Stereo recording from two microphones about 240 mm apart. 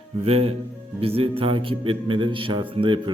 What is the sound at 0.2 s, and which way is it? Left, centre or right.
Speech, right.